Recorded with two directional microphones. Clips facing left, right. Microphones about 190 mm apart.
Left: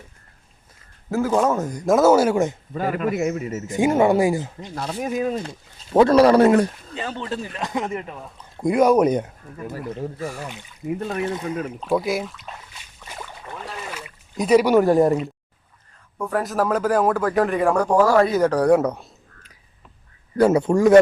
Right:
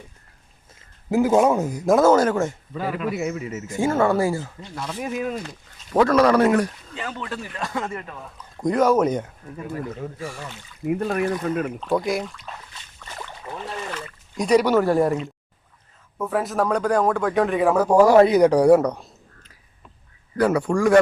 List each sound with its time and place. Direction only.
1.1 s speech: 15° right (ahead or behind)
2.0 s speech: 10° left (ahead or behind)
2.7 s a man's voice: 50° left (ahead or behind)
3.7 s speech: 15° left (ahead or behind)
4.9 s speech: 40° left (ahead or behind); by 9.3 s 15° left (ahead or behind)
9.7 s speech: 40° left (ahead or behind)
10.8 s speech: 60° right (ahead or behind)
11.8 s speech: 5° left (ahead or behind)
13.9 s speech: 5° left (ahead or behind)
16.1 s speech: centre (ahead or behind)
18.1 s speech: 20° right (ahead or behind)
18.8 s a sound: 5° left (ahead or behind)
20.3 s speech: 25° left (ahead or behind)